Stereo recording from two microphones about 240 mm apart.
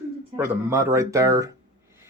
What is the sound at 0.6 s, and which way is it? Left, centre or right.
Speech, centre.